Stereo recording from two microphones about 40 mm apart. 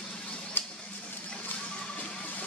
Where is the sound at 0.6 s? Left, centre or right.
Left.